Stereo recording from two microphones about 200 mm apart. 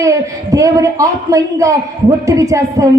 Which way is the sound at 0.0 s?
15° right (ahead or behind).